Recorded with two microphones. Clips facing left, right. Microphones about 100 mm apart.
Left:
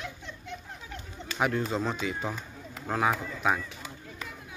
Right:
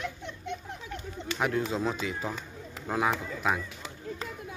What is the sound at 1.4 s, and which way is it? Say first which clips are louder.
Speech: left 1 dB; centre (ahead or behind).